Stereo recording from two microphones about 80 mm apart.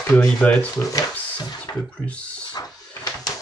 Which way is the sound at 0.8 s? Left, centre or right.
Left.